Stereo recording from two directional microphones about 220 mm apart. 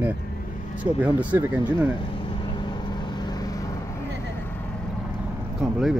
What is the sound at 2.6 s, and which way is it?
Vehicle, 20° left (ahead or behind).